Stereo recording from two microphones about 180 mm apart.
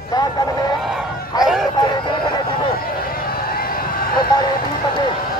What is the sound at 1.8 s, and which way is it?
Chicken, 25° left (ahead or behind).